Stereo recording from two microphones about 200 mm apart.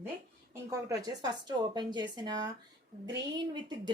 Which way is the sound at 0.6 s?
20° right (ahead or behind).